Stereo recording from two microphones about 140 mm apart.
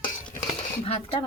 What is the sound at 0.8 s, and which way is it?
Speech, 40° left (ahead or behind).